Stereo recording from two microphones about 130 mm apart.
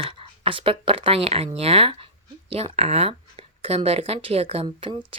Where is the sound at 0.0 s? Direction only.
40° right (ahead or behind).